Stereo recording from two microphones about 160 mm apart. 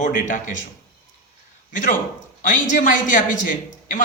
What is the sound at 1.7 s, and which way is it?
A man's voice, 55° left (ahead or behind).